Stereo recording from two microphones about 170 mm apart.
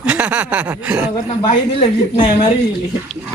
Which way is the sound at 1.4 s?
35° left (ahead or behind).